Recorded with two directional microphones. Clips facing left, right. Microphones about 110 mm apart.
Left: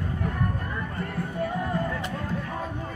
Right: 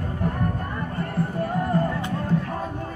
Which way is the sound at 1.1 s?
45° right (ahead or behind).